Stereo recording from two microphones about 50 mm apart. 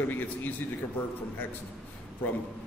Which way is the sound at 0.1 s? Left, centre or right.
Left.